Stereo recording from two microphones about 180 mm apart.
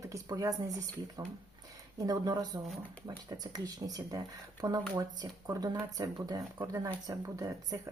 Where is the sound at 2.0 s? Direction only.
20° right (ahead or behind).